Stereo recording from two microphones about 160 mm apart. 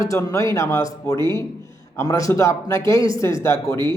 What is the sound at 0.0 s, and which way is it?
Speech, 20° left (ahead or behind).